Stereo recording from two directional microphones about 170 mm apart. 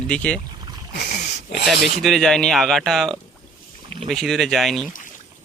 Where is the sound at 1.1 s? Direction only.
45° left (ahead or behind).